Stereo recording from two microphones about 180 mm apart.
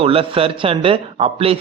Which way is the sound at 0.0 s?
30° right (ahead or behind).